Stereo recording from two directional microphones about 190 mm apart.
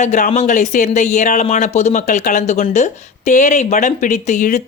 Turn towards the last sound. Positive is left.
turn(degrees=40)  # may be behind; listen again after turning